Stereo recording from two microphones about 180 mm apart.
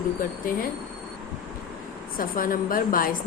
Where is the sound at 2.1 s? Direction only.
50° left (ahead or behind).